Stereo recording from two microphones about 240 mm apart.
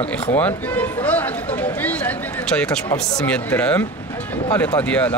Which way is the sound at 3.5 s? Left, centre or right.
Centre.